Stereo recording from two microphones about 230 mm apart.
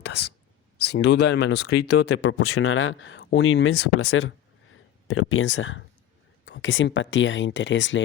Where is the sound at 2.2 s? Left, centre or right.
Left.